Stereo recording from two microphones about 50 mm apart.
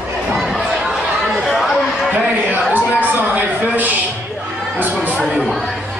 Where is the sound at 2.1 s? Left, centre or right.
Right.